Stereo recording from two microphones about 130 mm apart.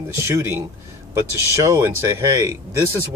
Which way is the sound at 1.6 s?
25° right (ahead or behind).